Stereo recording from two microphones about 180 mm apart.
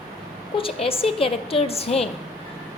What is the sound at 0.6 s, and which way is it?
A woman's voice, 30° left (ahead or behind).